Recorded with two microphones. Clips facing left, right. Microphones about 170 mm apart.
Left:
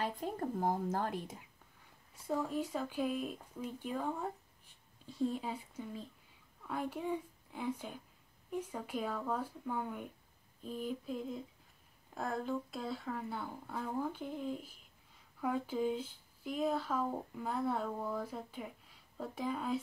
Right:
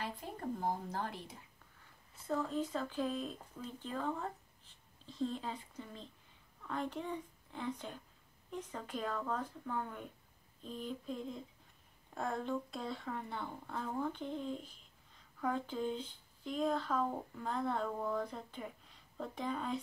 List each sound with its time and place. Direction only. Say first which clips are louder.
0.0 s speech: left 5 dB; 50° left (ahead or behind)
2.2 s speech: left 1 dB; 10° left (ahead or behind)